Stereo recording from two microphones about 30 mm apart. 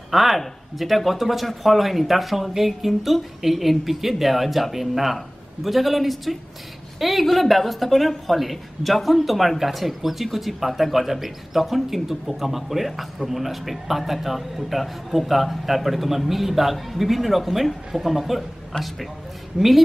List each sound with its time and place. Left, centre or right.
0.1 s a man's voice: centre
19.6 s a woman's voice: right